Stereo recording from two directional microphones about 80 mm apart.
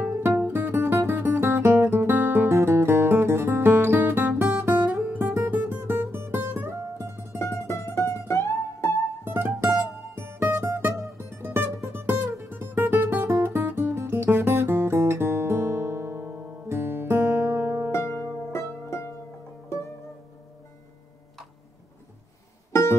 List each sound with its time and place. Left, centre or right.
0.4 s music: right
5.1 s guitar: right
7.3 s music: left
9.2 s music: right
13.4 s guitar: right
17.9 s music: left